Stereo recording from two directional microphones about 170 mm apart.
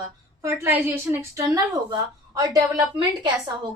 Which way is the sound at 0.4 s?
15° right (ahead or behind).